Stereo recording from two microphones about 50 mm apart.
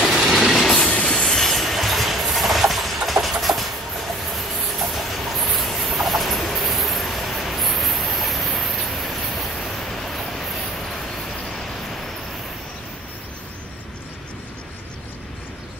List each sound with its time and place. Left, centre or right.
0.0 s train: centre
0.7 s train: left
1.1 s train: centre
4.9 s train: centre